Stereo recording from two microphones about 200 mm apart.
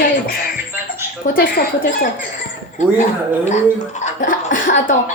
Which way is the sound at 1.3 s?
45° left (ahead or behind).